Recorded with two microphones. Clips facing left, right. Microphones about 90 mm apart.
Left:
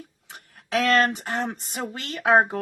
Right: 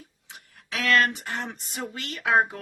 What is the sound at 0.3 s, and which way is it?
Speech, 45° left (ahead or behind).